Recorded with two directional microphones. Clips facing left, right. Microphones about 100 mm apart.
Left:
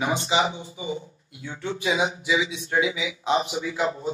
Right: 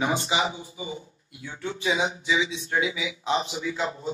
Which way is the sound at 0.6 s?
30° left (ahead or behind).